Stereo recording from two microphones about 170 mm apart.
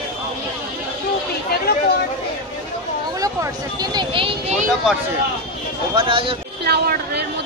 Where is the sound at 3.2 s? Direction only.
20° right (ahead or behind).